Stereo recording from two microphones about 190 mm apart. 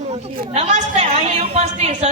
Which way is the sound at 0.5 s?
35° right (ahead or behind).